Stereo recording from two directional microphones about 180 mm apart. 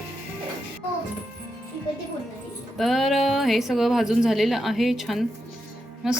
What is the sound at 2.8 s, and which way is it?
A woman's voice, centre (ahead or behind).